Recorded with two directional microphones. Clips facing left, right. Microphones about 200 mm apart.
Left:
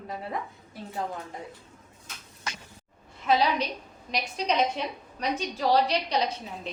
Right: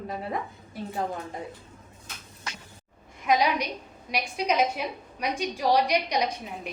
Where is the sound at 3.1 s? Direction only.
15° right (ahead or behind).